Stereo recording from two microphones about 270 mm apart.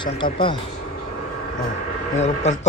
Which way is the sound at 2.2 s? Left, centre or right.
Left.